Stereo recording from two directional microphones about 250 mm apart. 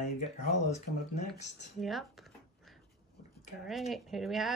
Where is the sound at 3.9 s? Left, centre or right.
Centre.